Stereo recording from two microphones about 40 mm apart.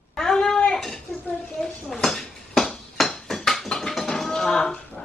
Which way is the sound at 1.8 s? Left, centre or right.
Centre.